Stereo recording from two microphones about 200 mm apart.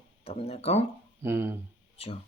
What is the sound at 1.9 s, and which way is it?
Speech, 30° left (ahead or behind).